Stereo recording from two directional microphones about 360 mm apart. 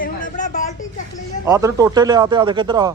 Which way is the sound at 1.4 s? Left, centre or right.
Centre.